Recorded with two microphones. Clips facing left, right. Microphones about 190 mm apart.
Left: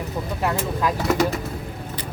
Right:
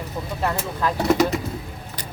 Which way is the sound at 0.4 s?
10° left (ahead or behind).